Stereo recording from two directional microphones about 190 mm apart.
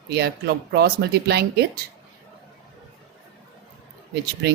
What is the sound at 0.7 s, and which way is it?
Speech, 60° right (ahead or behind).